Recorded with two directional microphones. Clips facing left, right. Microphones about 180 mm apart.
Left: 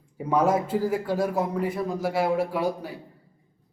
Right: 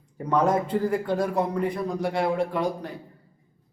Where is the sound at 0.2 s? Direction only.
5° left (ahead or behind).